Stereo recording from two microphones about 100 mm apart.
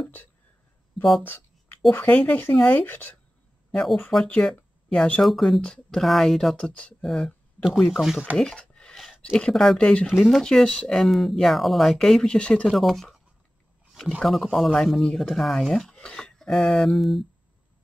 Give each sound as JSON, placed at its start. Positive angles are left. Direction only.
{"t": 1.2, "sound": "a sound", "side_deg": 20}
{"t": 1.9, "sound": "speech", "side_deg": 15}
{"t": 3.7, "sound": "speech", "side_deg": 5}
{"t": 8.4, "sound": "speech", "side_deg": 10}
{"t": 10.0, "sound": "speech", "side_deg": 0}
{"t": 14.2, "sound": "speech", "side_deg": 0}